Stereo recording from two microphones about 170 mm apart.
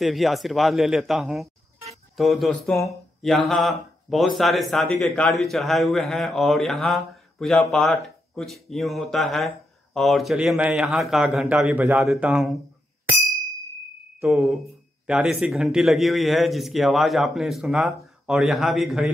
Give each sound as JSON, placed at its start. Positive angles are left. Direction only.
{"t": 0.0, "sound": "speech", "side_deg": 0}
{"t": 2.7, "sound": "speech", "side_deg": 15}
{"t": 3.2, "sound": "speech", "side_deg": 0}
{"t": 14.2, "sound": "speech", "side_deg": 0}